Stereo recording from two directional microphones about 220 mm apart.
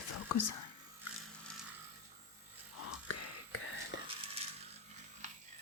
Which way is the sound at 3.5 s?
65° left (ahead or behind).